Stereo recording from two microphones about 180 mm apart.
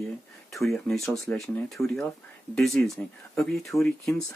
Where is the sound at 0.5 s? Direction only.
Centre (ahead or behind).